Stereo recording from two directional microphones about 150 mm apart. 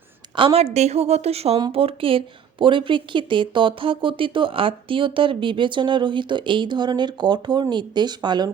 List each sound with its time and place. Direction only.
0.3 s a woman's voice: 40° right (ahead or behind)